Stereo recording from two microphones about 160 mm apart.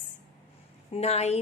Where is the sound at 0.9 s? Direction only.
40° left (ahead or behind).